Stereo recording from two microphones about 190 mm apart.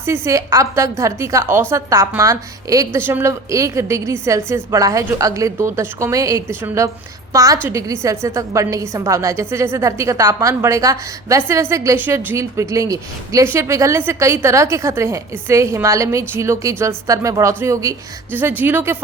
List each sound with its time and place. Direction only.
0.0 s a woman's voice: 15° right (ahead or behind)